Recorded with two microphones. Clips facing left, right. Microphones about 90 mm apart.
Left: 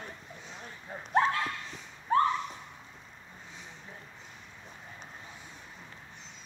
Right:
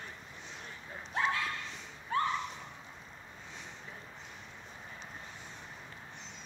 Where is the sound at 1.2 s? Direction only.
40° left (ahead or behind).